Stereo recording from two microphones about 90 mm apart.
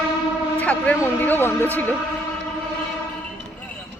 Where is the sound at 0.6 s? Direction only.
15° left (ahead or behind).